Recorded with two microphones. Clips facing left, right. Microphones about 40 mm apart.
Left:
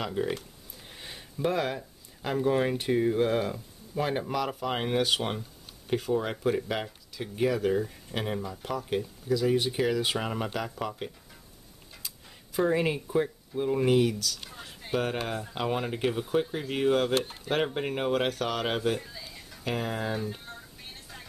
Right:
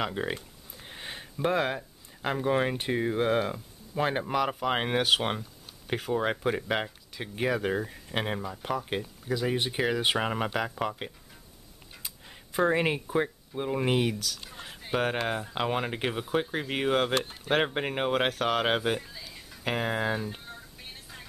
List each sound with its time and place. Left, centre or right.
0.0 s speech: right
0.8 s a sound: right
1.8 s speech: centre
11.9 s tick-tock: right
13.0 s speech: right
14.1 s speech: centre
14.5 s a sound: centre
14.9 s speech: right
18.9 s speech: centre
19.6 s speech: right
20.4 s vehicle: centre